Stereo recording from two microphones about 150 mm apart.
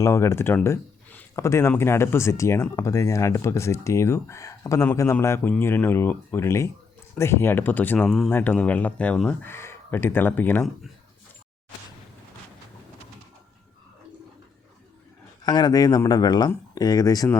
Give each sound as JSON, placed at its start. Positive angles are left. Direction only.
{"t": 0.0, "sound": "speech", "side_deg": 20}
{"t": 15.4, "sound": "speech", "side_deg": 30}